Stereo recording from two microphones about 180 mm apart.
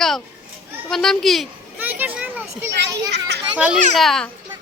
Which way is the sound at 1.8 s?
10° right (ahead or behind).